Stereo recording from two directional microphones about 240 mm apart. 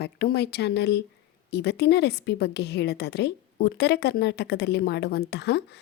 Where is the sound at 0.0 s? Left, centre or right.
Left.